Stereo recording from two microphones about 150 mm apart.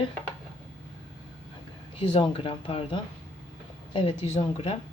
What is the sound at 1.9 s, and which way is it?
A woman's voice, 35° left (ahead or behind).